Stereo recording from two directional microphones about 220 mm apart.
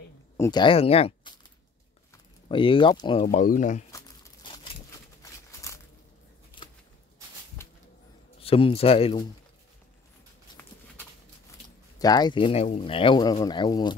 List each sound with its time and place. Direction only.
0.4 s speech: 20° left (ahead or behind)
2.4 s speech: 25° left (ahead or behind)
3.3 s speech: 35° left (ahead or behind)
3.9 s a sound: 20° left (ahead or behind)
8.4 s speech: 25° left (ahead or behind)
12.0 s speech: 20° left (ahead or behind)